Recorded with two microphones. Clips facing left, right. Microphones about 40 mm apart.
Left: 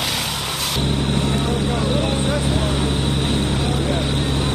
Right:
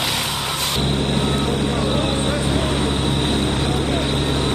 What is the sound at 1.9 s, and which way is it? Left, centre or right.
Vehicle, centre.